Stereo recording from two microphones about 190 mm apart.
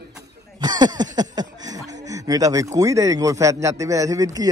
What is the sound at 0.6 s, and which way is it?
Speech, 20° right (ahead or behind).